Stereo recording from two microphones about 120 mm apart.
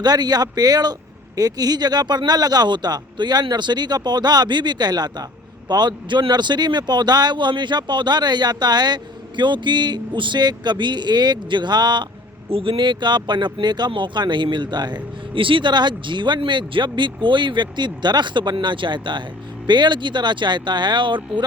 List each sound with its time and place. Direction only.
0.0 s speech: 35° right (ahead or behind)
12.5 s speech: 50° right (ahead or behind)